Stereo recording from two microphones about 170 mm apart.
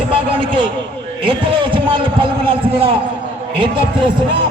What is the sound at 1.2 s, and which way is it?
A man's voice, 30° right (ahead or behind).